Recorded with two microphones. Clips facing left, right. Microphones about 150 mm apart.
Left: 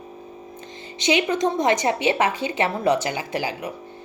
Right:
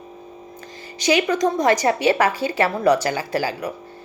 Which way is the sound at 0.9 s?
25° left (ahead or behind).